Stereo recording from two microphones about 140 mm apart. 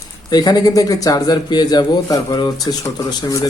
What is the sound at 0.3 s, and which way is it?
Speech, 30° left (ahead or behind).